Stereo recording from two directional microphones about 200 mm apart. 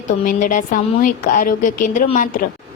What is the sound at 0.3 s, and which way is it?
A woman's voice, 40° left (ahead or behind).